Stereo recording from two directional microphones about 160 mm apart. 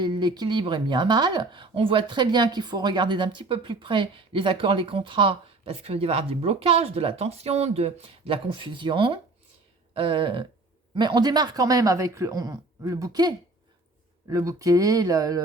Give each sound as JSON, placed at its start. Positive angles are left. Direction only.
{"t": 0.0, "sound": "speech", "side_deg": -25}